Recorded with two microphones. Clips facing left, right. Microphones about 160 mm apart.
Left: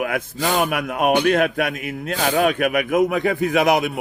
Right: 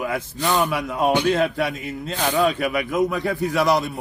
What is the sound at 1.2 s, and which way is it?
Speech, 65° left (ahead or behind).